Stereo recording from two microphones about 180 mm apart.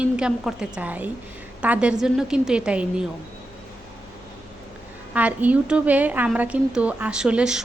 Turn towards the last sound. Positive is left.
turn(degrees=-5)  # may be behind; listen again after turning